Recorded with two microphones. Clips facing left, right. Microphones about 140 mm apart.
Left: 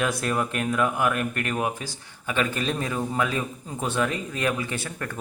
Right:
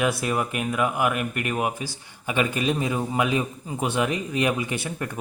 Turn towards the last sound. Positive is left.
turn(degrees=-15)  # may be behind; listen again after turning